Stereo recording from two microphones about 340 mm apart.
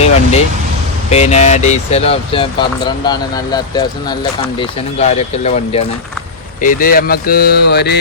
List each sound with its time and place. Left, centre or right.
0.0 s vehicle: centre
1.1 s speech: centre